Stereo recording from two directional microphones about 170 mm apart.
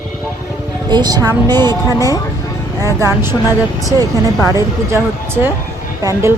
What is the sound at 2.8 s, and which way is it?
Speech, 15° right (ahead or behind).